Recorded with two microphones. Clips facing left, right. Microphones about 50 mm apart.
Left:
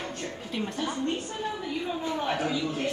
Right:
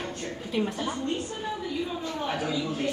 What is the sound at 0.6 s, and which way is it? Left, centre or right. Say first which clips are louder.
Speech: right 5 dB; centre.